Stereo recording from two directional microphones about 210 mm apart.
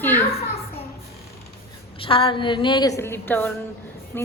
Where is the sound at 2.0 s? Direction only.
25° left (ahead or behind).